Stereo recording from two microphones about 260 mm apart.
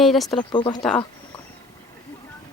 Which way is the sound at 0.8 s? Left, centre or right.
Centre.